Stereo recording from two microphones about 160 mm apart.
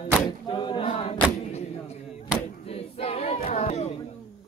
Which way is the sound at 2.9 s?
40° left (ahead or behind).